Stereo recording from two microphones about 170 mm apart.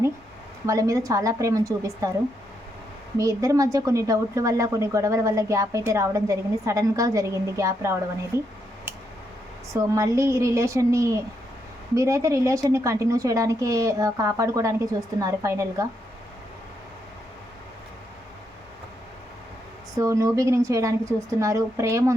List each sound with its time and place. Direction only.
0.7 s a woman's voice: 20° right (ahead or behind)
3.2 s a woman's voice: 20° right (ahead or behind)
9.9 s a woman's voice: 15° right (ahead or behind)
20.0 s a woman's voice: 20° right (ahead or behind)